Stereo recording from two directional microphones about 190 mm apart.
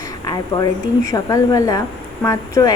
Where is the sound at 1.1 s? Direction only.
15° left (ahead or behind).